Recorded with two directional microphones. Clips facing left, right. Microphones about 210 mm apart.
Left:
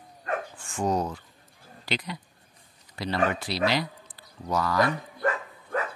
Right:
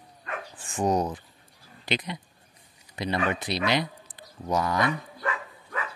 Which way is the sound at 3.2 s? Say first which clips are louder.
Left 2 dB; 20° right (ahead or behind).